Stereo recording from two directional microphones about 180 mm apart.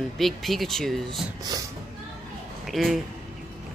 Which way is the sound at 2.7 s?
Centre (ahead or behind).